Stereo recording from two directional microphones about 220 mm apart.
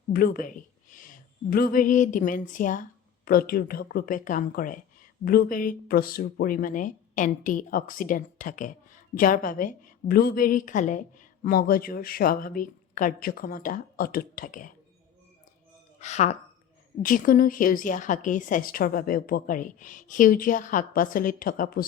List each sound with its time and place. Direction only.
0.1 s a woman's voice: 40° left (ahead or behind)
16.0 s a woman's voice: 30° left (ahead or behind)